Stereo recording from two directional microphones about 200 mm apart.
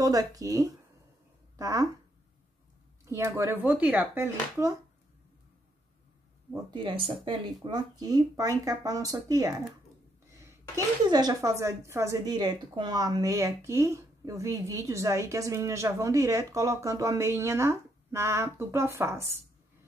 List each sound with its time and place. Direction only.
0.0 s a woman's voice: 20° right (ahead or behind)
3.1 s a woman's voice: 15° right (ahead or behind)
6.5 s a woman's voice: 25° right (ahead or behind)
11.1 s a woman's voice: 20° right (ahead or behind)